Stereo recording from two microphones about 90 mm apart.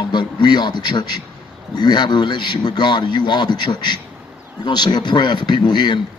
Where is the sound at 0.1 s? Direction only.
55° left (ahead or behind).